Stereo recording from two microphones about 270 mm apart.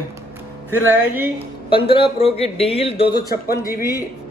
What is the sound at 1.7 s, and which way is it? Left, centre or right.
Speech, centre.